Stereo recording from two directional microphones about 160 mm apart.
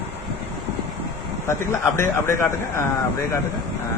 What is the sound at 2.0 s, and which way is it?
Speech, 15° left (ahead or behind).